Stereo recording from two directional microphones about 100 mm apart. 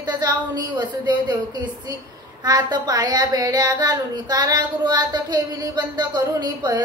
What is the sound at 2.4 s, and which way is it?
A woman's voice, 40° right (ahead or behind).